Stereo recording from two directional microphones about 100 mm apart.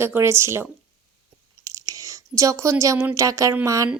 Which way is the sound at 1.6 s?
35° right (ahead or behind).